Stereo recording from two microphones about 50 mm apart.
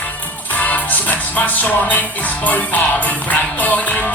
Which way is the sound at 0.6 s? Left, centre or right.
Left.